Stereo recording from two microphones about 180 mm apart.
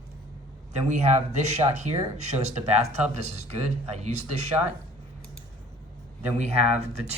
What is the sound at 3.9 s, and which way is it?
Speech, 35° right (ahead or behind).